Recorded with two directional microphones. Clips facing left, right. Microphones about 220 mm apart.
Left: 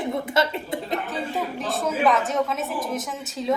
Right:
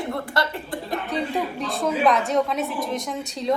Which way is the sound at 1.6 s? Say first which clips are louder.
Right 1 dB; centre (ahead or behind).